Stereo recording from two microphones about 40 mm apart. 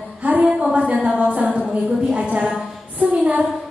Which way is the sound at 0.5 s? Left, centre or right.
Centre.